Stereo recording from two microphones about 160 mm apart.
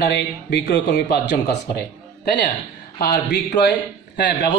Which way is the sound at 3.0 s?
85° left.